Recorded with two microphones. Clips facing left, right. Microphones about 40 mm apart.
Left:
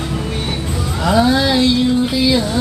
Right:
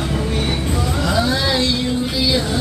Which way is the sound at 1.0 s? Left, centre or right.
Centre.